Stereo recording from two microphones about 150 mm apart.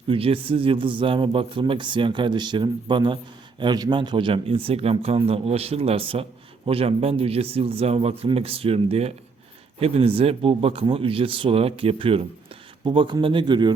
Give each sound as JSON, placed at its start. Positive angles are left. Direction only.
{"t": 0.1, "sound": "speech", "side_deg": -40}